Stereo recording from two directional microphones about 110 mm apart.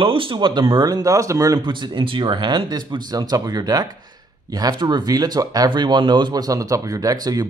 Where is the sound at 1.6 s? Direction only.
45° right (ahead or behind).